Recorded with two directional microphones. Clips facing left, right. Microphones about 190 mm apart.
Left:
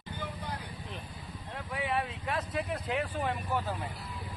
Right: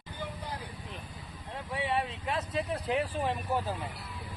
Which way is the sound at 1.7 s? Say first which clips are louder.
Right 1 dB; 25° right (ahead or behind).